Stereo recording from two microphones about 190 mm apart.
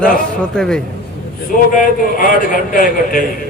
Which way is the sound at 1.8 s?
45° left (ahead or behind).